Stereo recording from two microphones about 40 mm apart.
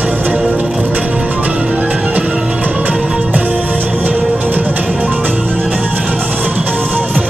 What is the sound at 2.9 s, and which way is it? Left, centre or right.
Music, right.